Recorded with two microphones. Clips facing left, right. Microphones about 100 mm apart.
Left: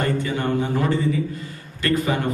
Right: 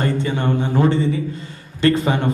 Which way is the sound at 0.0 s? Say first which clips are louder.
Right 2 dB; 25° right (ahead or behind).